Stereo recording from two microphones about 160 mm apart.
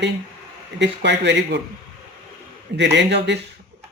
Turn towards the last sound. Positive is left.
turn(degrees=-90)